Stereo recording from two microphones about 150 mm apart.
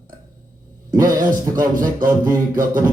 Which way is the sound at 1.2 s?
65° right (ahead or behind).